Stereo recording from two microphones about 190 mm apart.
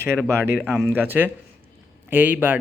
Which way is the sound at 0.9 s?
10° right (ahead or behind).